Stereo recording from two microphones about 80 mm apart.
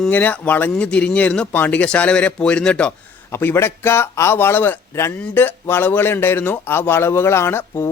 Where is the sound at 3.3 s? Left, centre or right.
Left.